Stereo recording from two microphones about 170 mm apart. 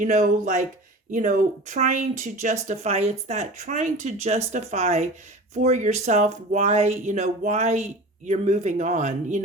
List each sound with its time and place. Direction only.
0.0 s speech: 50° right (ahead or behind)